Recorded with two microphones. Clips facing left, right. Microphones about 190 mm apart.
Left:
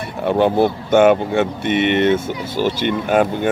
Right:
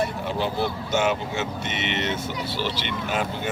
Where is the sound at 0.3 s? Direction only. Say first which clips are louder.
Left 11 dB; 55° left (ahead or behind).